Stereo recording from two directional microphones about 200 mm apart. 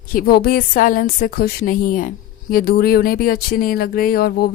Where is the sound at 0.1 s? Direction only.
45° left (ahead or behind).